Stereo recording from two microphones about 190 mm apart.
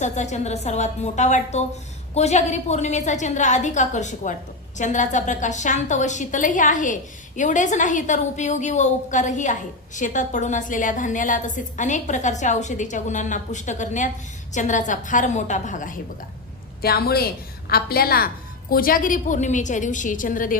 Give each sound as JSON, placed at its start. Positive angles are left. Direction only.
{"t": 0.0, "sound": "a woman's voice", "side_deg": 40}
{"t": 16.8, "sound": "a woman's voice", "side_deg": 55}